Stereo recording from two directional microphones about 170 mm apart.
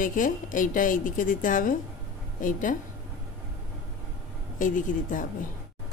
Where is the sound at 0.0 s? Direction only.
50° left (ahead or behind).